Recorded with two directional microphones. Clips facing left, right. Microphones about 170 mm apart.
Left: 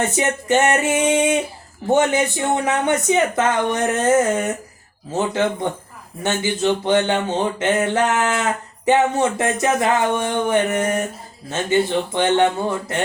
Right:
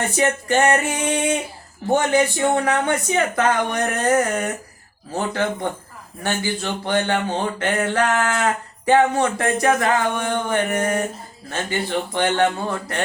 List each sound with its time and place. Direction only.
0.0 s speech: 20° left (ahead or behind)